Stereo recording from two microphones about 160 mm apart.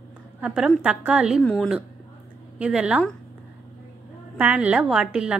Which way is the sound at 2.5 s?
10° right (ahead or behind).